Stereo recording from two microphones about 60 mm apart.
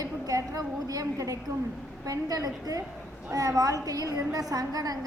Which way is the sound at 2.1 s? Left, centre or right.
Right.